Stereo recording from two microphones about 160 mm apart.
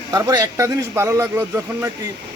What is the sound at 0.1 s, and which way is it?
A man's voice, 25° right (ahead or behind).